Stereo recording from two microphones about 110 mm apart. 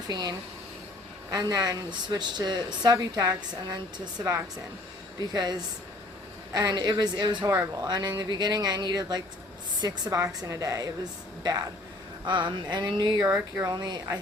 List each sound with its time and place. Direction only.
0.1 s a woman's voice: 40° right (ahead or behind)
7.4 s a woman's voice: 25° right (ahead or behind)
7.9 s a woman's voice: 40° right (ahead or behind)